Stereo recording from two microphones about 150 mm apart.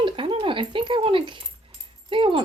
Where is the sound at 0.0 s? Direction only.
35° right (ahead or behind).